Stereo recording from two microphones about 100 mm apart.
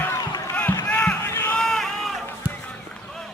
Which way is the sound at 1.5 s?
5° left (ahead or behind).